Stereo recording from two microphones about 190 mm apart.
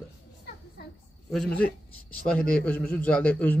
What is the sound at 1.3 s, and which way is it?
Speech, 5° left (ahead or behind).